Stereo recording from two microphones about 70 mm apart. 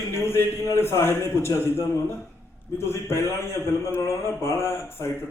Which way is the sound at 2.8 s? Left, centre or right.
Left.